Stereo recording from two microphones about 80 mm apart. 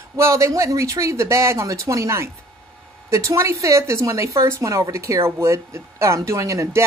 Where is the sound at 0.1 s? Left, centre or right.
Right.